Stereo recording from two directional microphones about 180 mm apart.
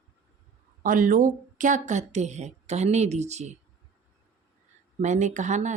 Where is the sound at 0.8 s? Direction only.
50° right (ahead or behind).